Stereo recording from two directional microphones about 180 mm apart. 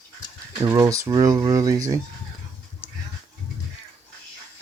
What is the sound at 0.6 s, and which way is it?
Speech, 20° right (ahead or behind).